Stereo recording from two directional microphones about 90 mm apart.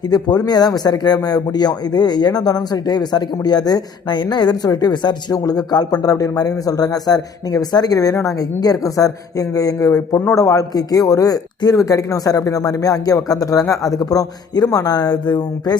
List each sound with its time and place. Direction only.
0.1 s speech: 50° left (ahead or behind)